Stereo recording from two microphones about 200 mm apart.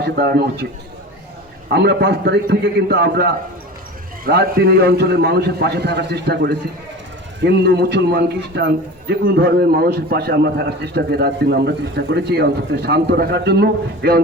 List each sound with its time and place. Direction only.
0.0 s a man's voice: 55° right (ahead or behind)
1.7 s a man's voice: 60° right (ahead or behind)